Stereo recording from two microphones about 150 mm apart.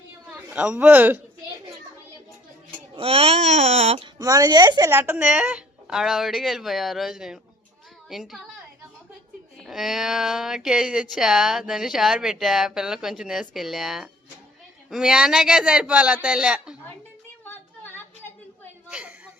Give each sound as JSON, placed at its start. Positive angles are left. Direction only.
{"t": 0.5, "sound": "speech", "side_deg": -5}
{"t": 2.9, "sound": "speech", "side_deg": -40}
{"t": 4.2, "sound": "a woman's voice", "side_deg": -25}
{"t": 4.9, "sound": "speech", "side_deg": -15}
{"t": 9.6, "sound": "speech", "side_deg": 0}
{"t": 17.4, "sound": "a sound", "side_deg": 15}
{"t": 18.9, "sound": "a sound", "side_deg": -10}